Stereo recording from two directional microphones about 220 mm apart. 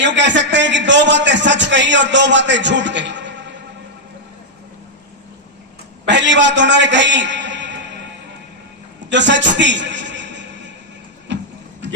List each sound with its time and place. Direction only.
0.0 s a man's voice: 55° right (ahead or behind)
6.1 s a man's voice: 55° right (ahead or behind)
9.0 s a man's voice: 55° right (ahead or behind)
11.3 s a sound: 55° right (ahead or behind)